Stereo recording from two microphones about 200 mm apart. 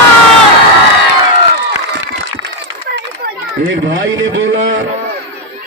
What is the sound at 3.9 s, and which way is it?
Speech, 70° right (ahead or behind).